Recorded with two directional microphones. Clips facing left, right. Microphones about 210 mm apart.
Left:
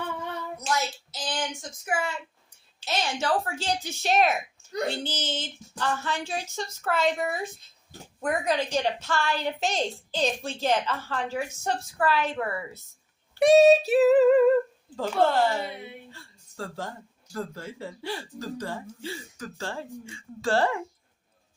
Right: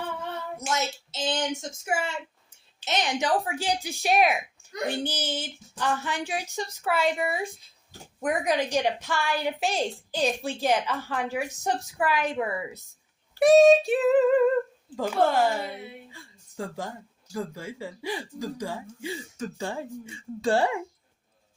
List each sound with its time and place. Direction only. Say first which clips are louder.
0.5 s a woman's voice: even; 25° right (ahead or behind)
13.4 s female singing: right 1 dB; centre (ahead or behind)
14.9 s a woman's voice: even; 10° right (ahead or behind)